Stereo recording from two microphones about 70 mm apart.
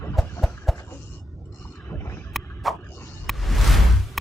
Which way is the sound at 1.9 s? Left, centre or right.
Left.